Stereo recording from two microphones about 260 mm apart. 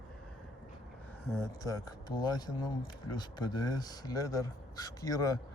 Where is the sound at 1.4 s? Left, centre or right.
Centre.